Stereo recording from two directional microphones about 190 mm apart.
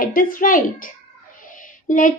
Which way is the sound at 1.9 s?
45° left (ahead or behind).